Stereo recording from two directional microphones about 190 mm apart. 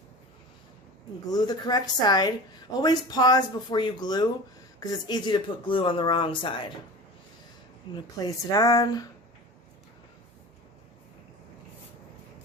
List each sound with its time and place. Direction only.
1.3 s speech: 20° left (ahead or behind)
7.9 s speech: 20° left (ahead or behind)